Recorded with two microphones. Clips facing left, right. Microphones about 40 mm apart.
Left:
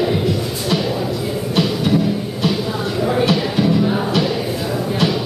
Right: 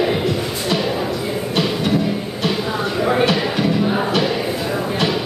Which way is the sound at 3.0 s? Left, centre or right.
Right.